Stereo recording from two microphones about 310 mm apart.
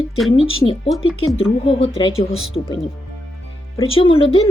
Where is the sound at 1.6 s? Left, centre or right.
Centre.